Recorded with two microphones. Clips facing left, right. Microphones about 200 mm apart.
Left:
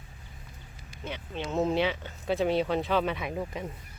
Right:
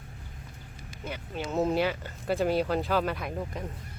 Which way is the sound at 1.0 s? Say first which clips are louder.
Even; 5° right (ahead or behind).